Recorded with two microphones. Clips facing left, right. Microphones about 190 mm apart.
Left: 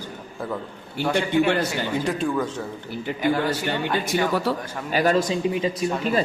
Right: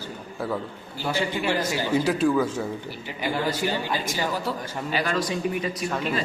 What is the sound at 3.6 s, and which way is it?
Speech, 65° left (ahead or behind).